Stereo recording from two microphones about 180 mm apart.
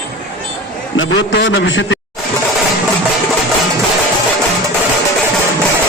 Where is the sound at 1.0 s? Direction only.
90° left.